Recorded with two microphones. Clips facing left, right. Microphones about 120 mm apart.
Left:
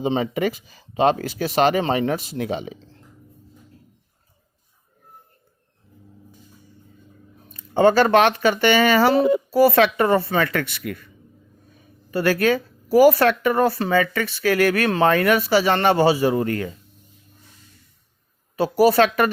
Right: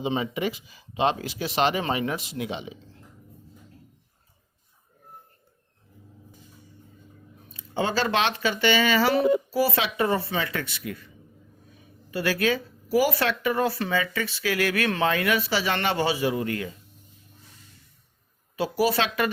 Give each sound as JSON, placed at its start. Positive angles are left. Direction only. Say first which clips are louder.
{"t": 0.1, "sound": "speech", "louder": "left 5 dB", "side_deg": 45}
{"t": 7.5, "sound": "speech", "louder": "left 11 dB", "side_deg": 50}
{"t": 12.1, "sound": "speech", "louder": "left 6 dB", "side_deg": 50}
{"t": 14.0, "sound": "speech", "louder": "left 6 dB", "side_deg": 55}
{"t": 18.5, "sound": "speech", "louder": "left 8 dB", "side_deg": 45}